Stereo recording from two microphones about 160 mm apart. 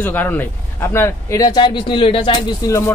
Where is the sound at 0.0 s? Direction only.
10° left (ahead or behind); by 2.7 s 30° left (ahead or behind).